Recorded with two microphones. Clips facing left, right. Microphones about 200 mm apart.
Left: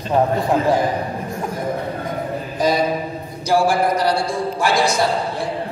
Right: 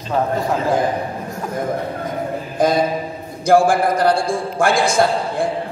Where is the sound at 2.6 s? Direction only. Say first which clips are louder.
Right 2 dB; 50° right (ahead or behind).